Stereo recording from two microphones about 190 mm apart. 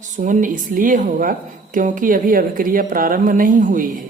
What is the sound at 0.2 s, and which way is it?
A woman's voice, 40° right (ahead or behind).